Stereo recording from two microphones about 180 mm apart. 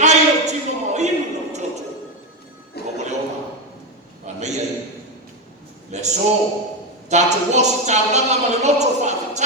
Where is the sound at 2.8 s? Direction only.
65° left (ahead or behind).